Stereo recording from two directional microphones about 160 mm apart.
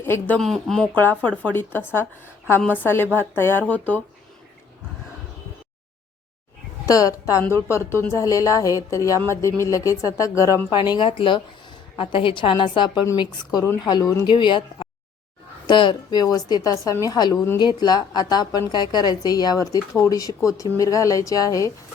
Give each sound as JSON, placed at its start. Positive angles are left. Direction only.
{"t": 0.0, "sound": "speech", "side_deg": 15}
{"t": 0.3, "sound": "speech", "side_deg": 0}
{"t": 6.8, "sound": "a woman's voice", "side_deg": 20}